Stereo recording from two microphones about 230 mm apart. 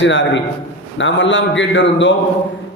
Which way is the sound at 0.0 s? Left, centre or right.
Left.